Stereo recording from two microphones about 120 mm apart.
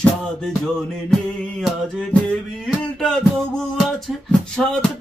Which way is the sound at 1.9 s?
5° left (ahead or behind).